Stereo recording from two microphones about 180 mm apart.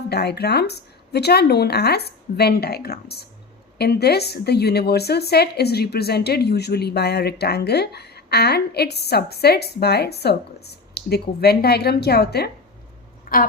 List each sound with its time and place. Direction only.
0.1 s a woman's voice: 65° left (ahead or behind)
13.3 s speech: 50° left (ahead or behind)